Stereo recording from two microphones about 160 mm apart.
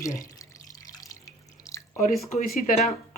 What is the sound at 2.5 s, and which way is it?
Speech, 60° left (ahead or behind).